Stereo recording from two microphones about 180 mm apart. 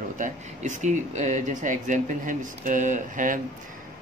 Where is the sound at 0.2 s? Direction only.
40° right (ahead or behind).